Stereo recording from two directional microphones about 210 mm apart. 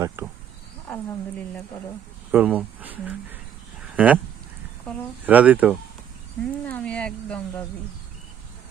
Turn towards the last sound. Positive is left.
turn(degrees=5)  # may be behind; listen again after turning